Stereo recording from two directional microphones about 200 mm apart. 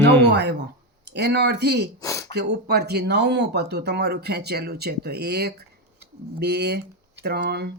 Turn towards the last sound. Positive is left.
turn(degrees=-55)  # may be behind; listen again after turning